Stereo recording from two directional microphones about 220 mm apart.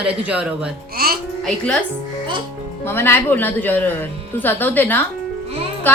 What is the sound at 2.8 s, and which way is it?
Speech, 10° left (ahead or behind).